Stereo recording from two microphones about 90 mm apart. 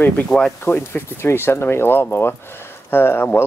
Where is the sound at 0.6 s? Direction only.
25° left (ahead or behind).